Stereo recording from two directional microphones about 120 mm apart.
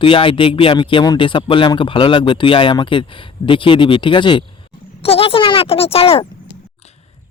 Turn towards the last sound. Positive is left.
turn(degrees=55)  # may be behind; listen again after turning